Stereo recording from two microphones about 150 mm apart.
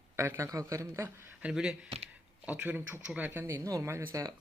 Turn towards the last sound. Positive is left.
turn(degrees=-20)  # may be behind; listen again after turning